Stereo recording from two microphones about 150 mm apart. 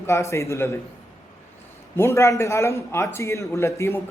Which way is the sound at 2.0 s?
20° left (ahead or behind).